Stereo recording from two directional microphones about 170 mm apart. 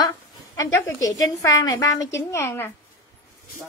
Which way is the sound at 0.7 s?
20° left (ahead or behind).